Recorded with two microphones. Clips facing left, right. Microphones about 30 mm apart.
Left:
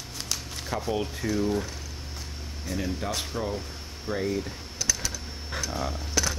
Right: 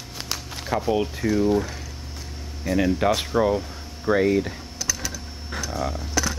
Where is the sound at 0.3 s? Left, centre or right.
Centre; by 4.6 s right.